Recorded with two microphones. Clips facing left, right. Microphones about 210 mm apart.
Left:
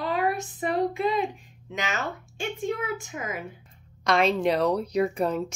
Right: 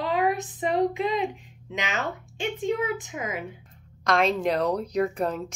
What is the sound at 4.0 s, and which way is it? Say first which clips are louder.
A woman's voice: left 1 dB; centre (ahead or behind).